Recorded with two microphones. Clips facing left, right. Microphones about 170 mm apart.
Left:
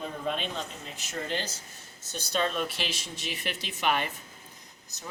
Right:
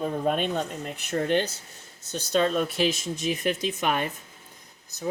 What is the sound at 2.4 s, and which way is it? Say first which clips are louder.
Speech: right 7 dB; 45° right (ahead or behind).